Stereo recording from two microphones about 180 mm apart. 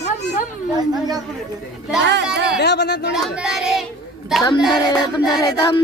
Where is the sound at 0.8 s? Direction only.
20° right (ahead or behind).